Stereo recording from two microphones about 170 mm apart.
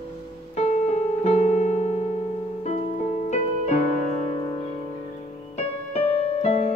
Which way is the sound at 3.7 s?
40° left (ahead or behind).